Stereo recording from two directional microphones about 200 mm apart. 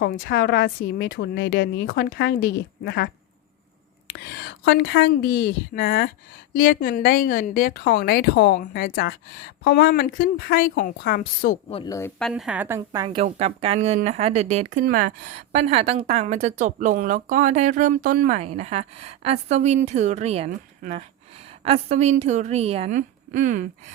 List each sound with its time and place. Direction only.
0.0 s speech: 50° left (ahead or behind)
4.1 s a woman's voice: 55° left (ahead or behind)
8.6 s a woman's voice: 45° left (ahead or behind)
11.9 s a woman's voice: 15° left (ahead or behind)
12.2 s a woman's voice: 5° right (ahead or behind); by 13.2 s 20° right (ahead or behind)
13.2 s speech: 30° right (ahead or behind)